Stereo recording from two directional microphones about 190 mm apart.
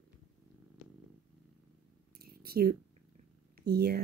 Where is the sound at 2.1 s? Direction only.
55° right (ahead or behind).